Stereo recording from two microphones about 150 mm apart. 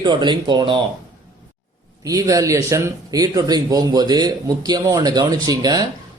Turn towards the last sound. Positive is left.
turn(degrees=-25)  # may be behind; listen again after turning